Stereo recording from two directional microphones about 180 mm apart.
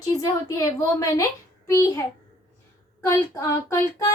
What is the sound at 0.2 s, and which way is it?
A child's voice, 20° left (ahead or behind).